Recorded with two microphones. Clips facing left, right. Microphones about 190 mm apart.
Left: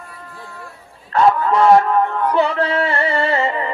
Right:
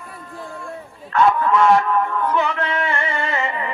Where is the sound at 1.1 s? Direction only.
35° left (ahead or behind).